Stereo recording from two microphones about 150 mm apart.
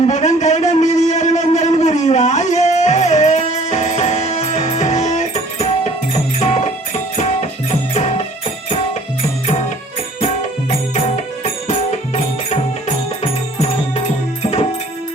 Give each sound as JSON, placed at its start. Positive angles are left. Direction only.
{"t": 0.0, "sound": "a sound", "side_deg": 50}
{"t": 7.7, "sound": "music", "side_deg": 50}
{"t": 10.2, "sound": "music", "side_deg": 50}